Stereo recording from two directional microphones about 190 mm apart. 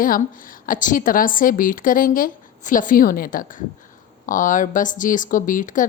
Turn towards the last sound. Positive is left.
turn(degrees=45)  # may be behind; listen again after turning